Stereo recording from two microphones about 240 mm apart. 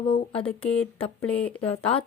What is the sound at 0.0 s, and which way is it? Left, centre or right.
Speech, left.